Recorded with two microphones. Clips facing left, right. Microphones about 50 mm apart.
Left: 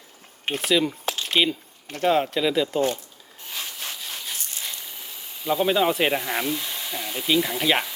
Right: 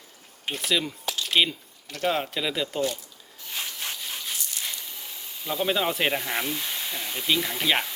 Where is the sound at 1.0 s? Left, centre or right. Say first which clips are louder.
Left 3 dB; left.